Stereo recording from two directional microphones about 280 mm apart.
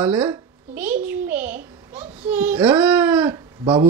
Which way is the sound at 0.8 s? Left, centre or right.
Centre.